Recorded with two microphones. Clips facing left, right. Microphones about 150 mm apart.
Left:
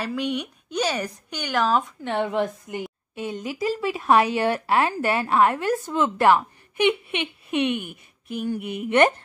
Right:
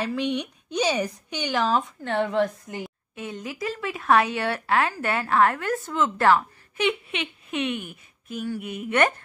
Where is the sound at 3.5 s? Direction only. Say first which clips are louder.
Left 6 dB; 30° left (ahead or behind).